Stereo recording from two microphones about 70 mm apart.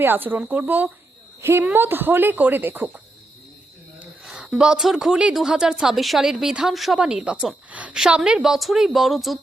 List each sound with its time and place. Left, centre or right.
0.0 s speech: right
1.4 s a woman's voice: right
4.2 s a woman's voice: centre
7.7 s a woman's voice: centre